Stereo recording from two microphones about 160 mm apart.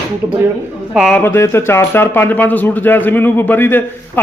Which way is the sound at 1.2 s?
15° left (ahead or behind).